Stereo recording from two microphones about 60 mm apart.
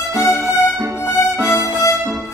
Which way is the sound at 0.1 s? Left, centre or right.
Left.